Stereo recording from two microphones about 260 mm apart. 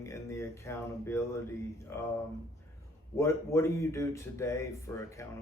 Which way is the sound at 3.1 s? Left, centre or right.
Centre.